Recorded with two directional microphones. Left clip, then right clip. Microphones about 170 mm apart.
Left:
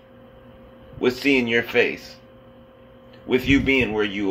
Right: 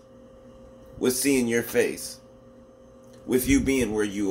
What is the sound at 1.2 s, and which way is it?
Speech, 20° right (ahead or behind).